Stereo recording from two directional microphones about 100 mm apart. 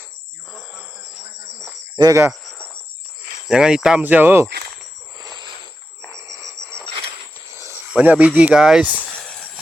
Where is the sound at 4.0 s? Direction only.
20° right (ahead or behind).